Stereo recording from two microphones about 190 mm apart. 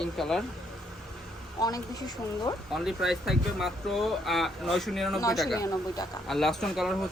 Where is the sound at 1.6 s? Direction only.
20° left (ahead or behind).